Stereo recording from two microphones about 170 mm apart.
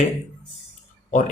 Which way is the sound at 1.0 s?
45° left (ahead or behind).